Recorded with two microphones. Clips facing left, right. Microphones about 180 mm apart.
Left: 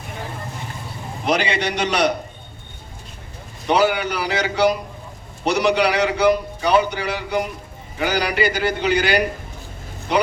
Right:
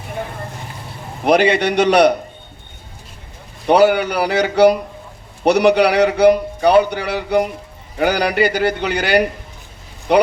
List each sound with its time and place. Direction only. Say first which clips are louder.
1.2 s a man's voice: right 7 dB; 55° right (ahead or behind)
3.7 s a man's voice: right 6 dB; 55° right (ahead or behind)